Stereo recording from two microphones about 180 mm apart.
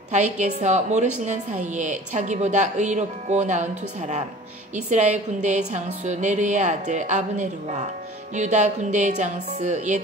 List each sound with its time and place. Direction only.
0.4 s a woman's voice: 40° right (ahead or behind)
4.7 s a woman's voice: 40° right (ahead or behind)